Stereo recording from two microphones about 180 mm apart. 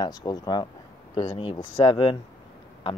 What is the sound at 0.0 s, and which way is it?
Speech, 20° left (ahead or behind).